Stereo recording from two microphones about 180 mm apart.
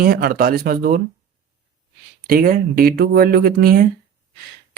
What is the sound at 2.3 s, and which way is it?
Speech, 55° right (ahead or behind).